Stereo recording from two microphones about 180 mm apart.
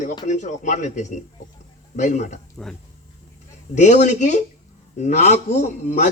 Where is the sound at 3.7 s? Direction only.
40° left (ahead or behind).